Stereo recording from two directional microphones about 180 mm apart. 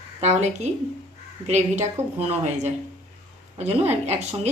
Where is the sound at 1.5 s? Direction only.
40° right (ahead or behind).